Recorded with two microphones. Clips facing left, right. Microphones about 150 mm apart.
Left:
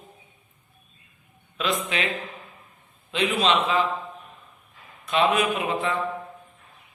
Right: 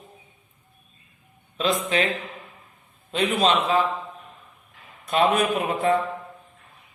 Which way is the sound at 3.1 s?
40° right (ahead or behind).